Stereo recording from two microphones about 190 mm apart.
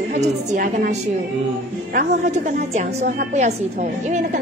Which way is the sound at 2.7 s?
35° right (ahead or behind).